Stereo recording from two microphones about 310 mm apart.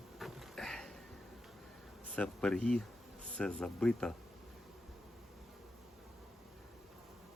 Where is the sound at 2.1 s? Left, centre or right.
Centre.